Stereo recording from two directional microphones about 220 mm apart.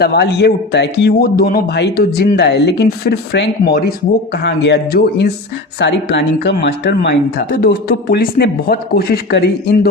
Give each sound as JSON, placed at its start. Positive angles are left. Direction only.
{"t": 0.0, "sound": "speech", "side_deg": 50}